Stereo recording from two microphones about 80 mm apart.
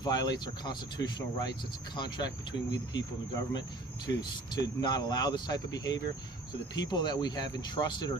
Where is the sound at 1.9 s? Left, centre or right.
Left.